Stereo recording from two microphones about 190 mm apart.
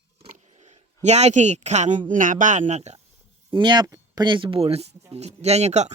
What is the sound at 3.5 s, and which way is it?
Speech, 25° right (ahead or behind).